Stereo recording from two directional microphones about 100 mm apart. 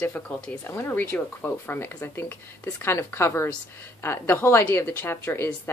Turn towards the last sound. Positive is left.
turn(degrees=25)  # may be behind; listen again after turning